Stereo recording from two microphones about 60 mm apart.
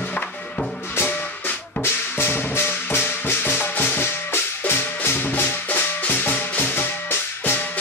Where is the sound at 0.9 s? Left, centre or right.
Left.